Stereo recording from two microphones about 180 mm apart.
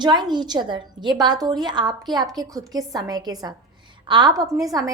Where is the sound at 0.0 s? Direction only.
25° right (ahead or behind).